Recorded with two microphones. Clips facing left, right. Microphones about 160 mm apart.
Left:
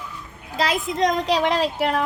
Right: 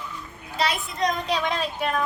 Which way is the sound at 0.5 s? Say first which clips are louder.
Left 4 dB; 90° left.